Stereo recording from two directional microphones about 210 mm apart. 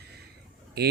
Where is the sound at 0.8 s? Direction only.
50° right (ahead or behind).